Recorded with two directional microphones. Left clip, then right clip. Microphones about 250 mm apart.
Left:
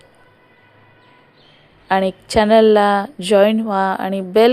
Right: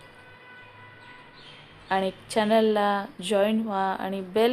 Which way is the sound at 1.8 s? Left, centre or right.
Left.